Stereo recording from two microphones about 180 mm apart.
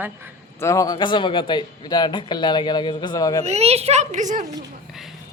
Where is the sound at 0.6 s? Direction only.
15° left (ahead or behind).